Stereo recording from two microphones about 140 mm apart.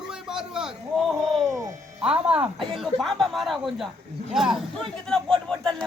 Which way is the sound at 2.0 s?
5° right (ahead or behind).